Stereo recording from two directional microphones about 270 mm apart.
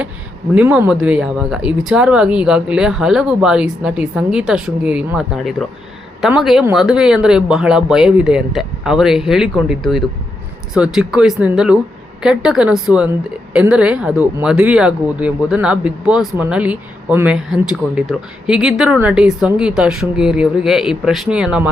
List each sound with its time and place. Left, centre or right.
0.5 s speech: centre